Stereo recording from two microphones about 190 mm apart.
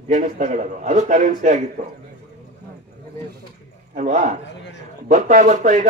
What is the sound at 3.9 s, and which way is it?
Speech, 40° right (ahead or behind).